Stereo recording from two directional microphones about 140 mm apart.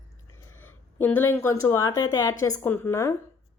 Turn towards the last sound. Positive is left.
turn(degrees=20)  # may be behind; listen again after turning